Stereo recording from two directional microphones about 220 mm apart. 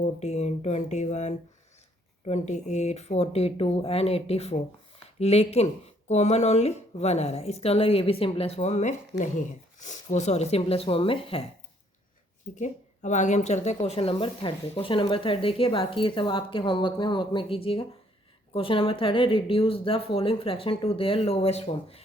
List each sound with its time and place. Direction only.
0.0 s speech: 30° left (ahead or behind)
12.5 s speech: 35° left (ahead or behind)